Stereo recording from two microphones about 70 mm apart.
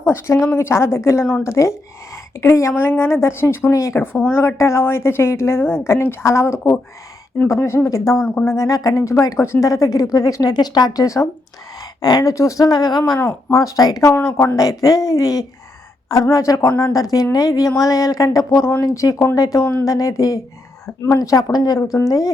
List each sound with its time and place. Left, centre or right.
0.0 s speech: left
4.0 s speech: left
11.0 s speech: left
16.9 s speech: left
21.5 s speech: left
21.9 s speech: left